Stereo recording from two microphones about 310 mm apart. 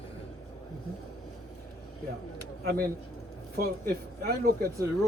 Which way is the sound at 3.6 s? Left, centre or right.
Right.